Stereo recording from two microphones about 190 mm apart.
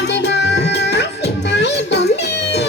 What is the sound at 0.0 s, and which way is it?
Music, 65° left (ahead or behind).